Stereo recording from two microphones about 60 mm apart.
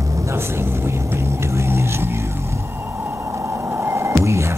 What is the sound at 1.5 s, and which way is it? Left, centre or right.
Vehicle, right.